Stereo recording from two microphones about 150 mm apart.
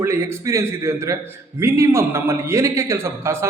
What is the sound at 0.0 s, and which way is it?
A man's voice, 15° right (ahead or behind).